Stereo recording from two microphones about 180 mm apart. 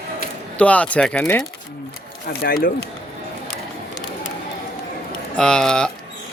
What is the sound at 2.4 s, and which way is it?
Speech, 60° left (ahead or behind).